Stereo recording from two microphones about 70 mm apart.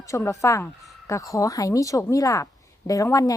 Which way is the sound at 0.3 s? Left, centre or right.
Left.